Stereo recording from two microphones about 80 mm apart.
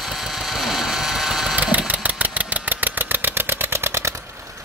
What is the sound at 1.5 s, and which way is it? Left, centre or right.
Engine, centre.